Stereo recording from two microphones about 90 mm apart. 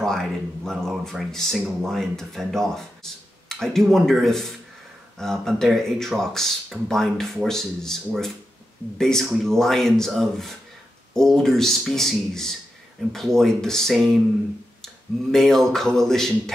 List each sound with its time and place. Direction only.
0.0 s speech: 5° left (ahead or behind)
15.3 s speech: 5° left (ahead or behind)